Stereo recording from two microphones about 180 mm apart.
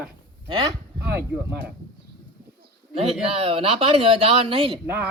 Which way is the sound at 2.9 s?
35° right (ahead or behind).